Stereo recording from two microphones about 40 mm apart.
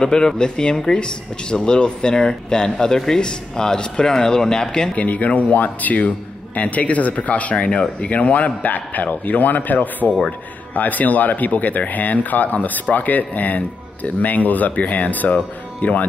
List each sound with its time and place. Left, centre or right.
0.0 s speech: centre
4.9 s speech: left